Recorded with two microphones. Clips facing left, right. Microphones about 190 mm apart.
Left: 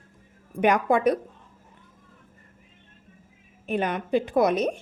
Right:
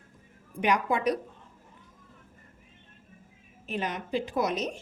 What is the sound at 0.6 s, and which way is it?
Speech, 50° left (ahead or behind).